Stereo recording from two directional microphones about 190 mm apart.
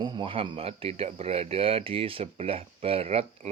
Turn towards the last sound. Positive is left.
turn(degrees=-30)  # may be behind; listen again after turning